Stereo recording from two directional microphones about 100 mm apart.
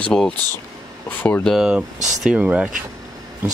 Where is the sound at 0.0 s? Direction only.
5° left (ahead or behind).